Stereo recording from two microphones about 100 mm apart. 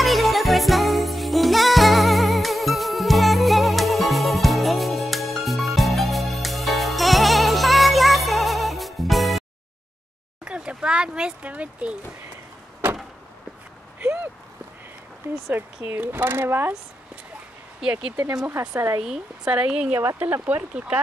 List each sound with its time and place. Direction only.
0.0 s music: centre (ahead or behind)
10.4 s a sound: 10° right (ahead or behind)
13.9 s a sound: 20° right (ahead or behind)
15.5 s speech: 20° right (ahead or behind)
18.2 s speech: 30° right (ahead or behind)
18.9 s speech: 5° right (ahead or behind)